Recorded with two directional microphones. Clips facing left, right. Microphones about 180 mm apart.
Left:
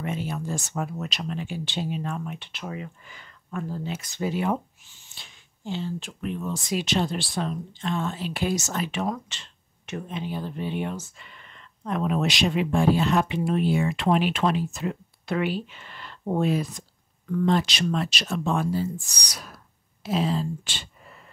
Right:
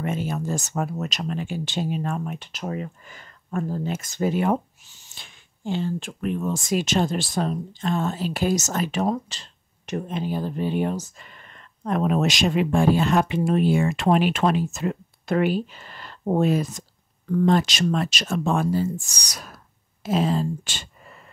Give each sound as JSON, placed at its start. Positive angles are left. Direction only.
{"t": 0.0, "sound": "speech", "side_deg": -45}